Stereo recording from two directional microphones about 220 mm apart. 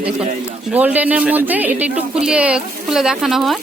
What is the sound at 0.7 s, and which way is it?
A woman's voice, 5° right (ahead or behind).